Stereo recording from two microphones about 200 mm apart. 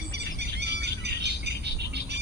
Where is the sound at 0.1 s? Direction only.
55° right (ahead or behind).